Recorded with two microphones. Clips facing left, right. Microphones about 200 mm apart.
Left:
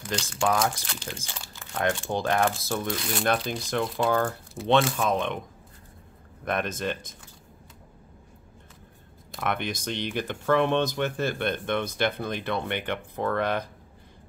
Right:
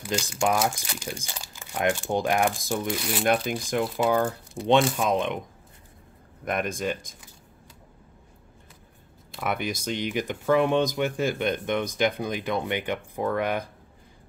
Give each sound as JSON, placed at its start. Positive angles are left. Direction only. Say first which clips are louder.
{"t": 0.0, "sound": "speech", "louder": "right 1 dB", "side_deg": -10}
{"t": 4.1, "sound": "speech", "louder": "right 1 dB", "side_deg": -15}
{"t": 6.4, "sound": "speech", "louder": "right 1 dB", "side_deg": -10}
{"t": 9.4, "sound": "speech", "louder": "right 1 dB", "side_deg": -10}